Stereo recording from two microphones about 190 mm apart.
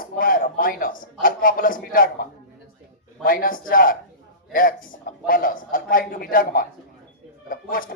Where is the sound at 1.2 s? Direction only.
50° left (ahead or behind).